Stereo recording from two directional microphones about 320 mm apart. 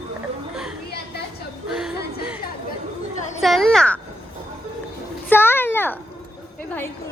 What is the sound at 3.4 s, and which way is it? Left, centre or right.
Speech, centre.